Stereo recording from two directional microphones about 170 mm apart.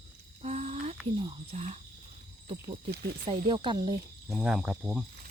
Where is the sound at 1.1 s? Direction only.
30° right (ahead or behind).